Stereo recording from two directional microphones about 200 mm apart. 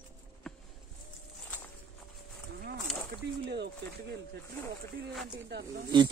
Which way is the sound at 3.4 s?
55° right (ahead or behind).